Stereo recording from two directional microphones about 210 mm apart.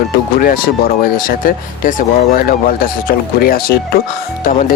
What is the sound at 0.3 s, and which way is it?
Speech, 40° left (ahead or behind).